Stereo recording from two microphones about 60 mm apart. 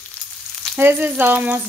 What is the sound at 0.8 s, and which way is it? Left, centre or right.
Speech, right.